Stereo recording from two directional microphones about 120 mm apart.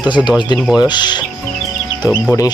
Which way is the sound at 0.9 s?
40° left (ahead or behind).